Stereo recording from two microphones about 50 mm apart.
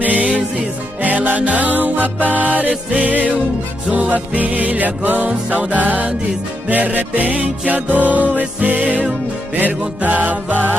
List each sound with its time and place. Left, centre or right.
0.0 s music: right